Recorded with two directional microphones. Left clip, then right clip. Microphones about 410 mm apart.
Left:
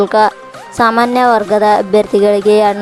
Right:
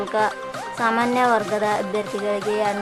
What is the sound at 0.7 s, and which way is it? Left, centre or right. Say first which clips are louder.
Music: left 10 dB; centre.